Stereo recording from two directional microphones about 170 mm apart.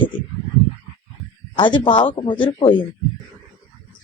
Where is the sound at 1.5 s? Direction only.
30° left (ahead or behind).